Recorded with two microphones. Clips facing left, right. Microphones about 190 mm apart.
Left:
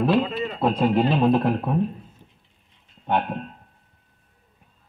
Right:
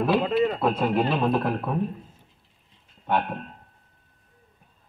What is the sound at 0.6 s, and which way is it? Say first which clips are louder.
Speech: left 3 dB; 30° left (ahead or behind).